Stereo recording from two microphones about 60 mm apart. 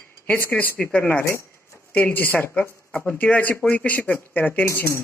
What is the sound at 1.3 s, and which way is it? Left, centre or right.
Cutlery, left.